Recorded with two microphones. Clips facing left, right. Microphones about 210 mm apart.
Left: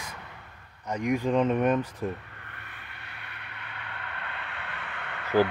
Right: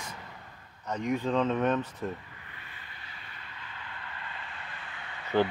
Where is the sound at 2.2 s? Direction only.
65° left (ahead or behind).